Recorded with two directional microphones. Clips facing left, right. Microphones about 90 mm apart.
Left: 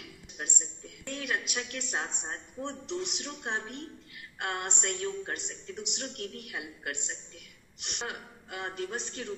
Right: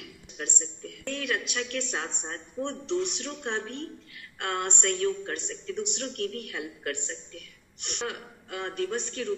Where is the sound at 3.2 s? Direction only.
20° left (ahead or behind).